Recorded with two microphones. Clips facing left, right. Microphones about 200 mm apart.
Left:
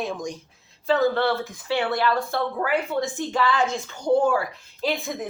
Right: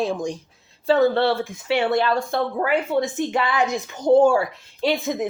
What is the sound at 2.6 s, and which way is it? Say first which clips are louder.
Speech: right 3 dB; 40° right (ahead or behind).